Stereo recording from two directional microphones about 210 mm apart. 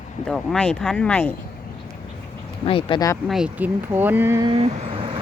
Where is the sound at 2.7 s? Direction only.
25° left (ahead or behind).